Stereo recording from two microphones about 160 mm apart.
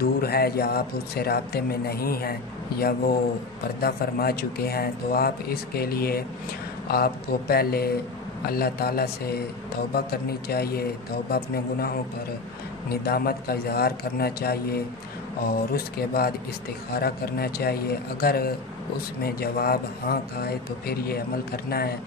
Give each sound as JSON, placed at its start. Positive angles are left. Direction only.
{"t": 0.0, "sound": "speech", "side_deg": 75}